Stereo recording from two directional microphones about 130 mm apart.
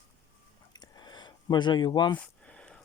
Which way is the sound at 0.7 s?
30° left (ahead or behind).